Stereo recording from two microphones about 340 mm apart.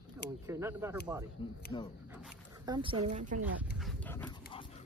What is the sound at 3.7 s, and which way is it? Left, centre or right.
Dog, centre.